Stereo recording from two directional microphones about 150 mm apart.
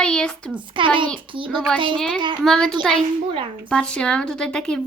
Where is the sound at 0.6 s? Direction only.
35° right (ahead or behind).